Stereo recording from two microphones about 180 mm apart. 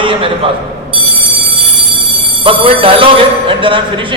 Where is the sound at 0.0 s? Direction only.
30° right (ahead or behind).